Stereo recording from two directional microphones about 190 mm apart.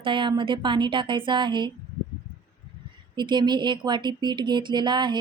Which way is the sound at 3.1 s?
25° right (ahead or behind).